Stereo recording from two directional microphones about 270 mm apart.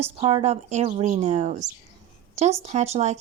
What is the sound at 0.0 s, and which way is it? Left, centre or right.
A woman's voice, right.